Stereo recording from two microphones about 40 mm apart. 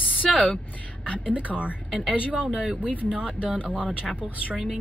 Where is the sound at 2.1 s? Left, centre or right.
Right.